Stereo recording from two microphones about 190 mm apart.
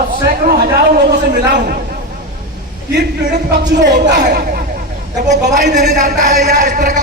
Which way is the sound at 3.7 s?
65° right (ahead or behind).